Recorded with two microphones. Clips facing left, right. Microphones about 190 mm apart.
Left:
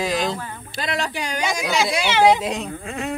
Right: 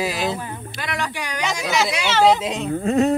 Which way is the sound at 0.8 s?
30° left (ahead or behind).